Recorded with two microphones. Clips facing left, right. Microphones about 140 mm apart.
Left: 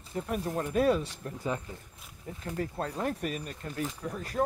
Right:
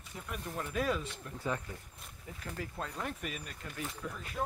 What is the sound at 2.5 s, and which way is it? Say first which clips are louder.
Speech: left 7 dB; 35° left (ahead or behind).